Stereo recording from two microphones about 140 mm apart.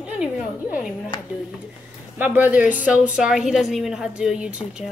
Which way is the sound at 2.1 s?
10° right (ahead or behind).